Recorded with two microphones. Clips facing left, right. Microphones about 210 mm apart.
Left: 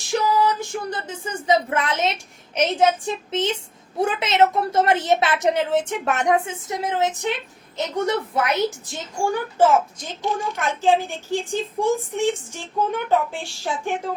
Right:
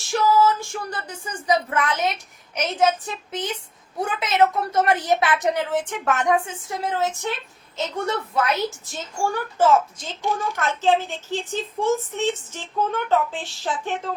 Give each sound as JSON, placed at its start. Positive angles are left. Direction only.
{"t": 0.1, "sound": "a sound", "side_deg": 20}
{"t": 2.6, "sound": "a woman's voice", "side_deg": 25}
{"t": 4.0, "sound": "a woman's voice", "side_deg": 25}